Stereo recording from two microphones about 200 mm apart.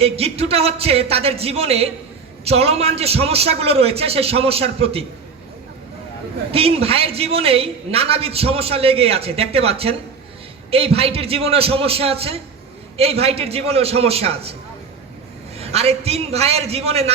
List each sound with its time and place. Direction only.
0.0 s a man's voice: 30° right (ahead or behind)
6.5 s a man's voice: 30° right (ahead or behind)
15.5 s speech: 30° right (ahead or behind)